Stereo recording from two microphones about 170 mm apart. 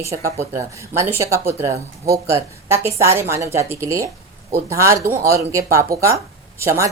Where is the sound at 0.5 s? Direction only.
15° right (ahead or behind).